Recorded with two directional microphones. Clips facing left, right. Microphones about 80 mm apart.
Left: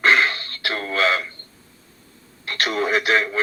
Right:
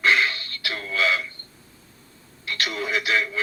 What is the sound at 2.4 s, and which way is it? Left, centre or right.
Speech, left.